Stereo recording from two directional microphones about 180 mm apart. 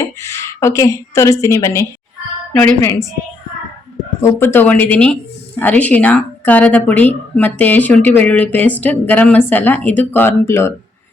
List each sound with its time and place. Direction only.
0.0 s a woman's voice: 15° left (ahead or behind)
4.4 s speech: 10° left (ahead or behind)